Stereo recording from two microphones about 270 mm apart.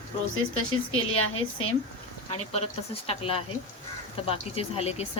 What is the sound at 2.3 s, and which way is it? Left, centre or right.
Speech, left.